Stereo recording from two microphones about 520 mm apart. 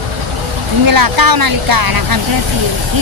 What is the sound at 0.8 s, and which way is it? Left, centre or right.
Speech, right.